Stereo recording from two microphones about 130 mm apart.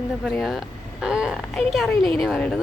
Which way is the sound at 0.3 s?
Centre (ahead or behind).